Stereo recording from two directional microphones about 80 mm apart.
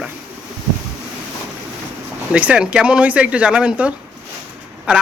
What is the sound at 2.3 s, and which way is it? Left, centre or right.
Speech, centre.